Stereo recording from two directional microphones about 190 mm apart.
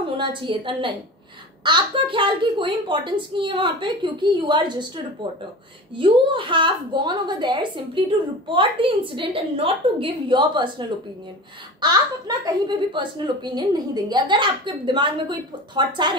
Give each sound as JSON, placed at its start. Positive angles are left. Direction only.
{"t": 0.2, "sound": "a woman's voice", "side_deg": -25}